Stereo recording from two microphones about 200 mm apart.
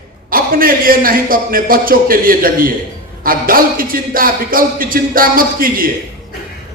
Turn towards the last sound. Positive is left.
turn(degrees=-45)  # may be behind; listen again after turning